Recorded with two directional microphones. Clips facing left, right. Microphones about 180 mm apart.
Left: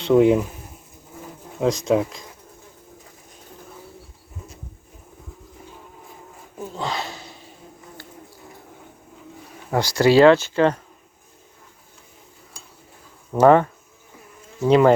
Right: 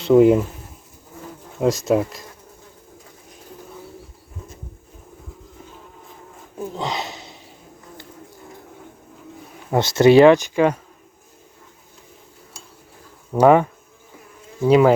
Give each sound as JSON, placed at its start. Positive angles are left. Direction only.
{"t": 0.0, "sound": "speech", "side_deg": 0}
{"t": 1.6, "sound": "speech", "side_deg": -5}
{"t": 6.6, "sound": "a sound", "side_deg": -20}
{"t": 9.7, "sound": "speech", "side_deg": -20}
{"t": 13.3, "sound": "speech", "side_deg": -10}